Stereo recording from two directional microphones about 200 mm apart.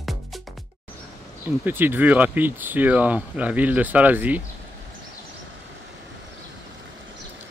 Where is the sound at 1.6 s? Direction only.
10° right (ahead or behind).